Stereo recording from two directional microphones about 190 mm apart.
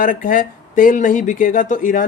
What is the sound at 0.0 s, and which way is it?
Speech, 45° left (ahead or behind).